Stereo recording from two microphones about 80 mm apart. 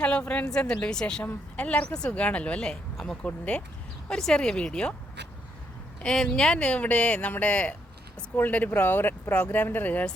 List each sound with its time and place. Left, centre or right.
0.0 s a woman's voice: centre
6.0 s a woman's voice: centre